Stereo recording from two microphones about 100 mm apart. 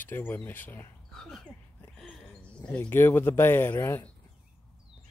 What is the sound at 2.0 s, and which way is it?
Cricket, 5° left (ahead or behind).